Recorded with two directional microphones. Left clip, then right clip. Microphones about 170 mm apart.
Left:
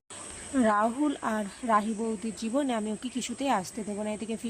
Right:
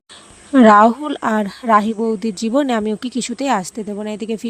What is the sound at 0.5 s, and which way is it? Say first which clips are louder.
Speech: right 16 dB; 50° right (ahead or behind).